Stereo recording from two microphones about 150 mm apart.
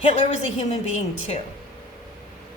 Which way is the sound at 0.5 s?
50° left (ahead or behind).